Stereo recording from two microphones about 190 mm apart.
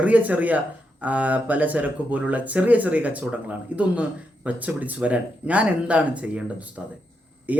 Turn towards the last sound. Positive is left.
turn(degrees=-10)  # may be behind; listen again after turning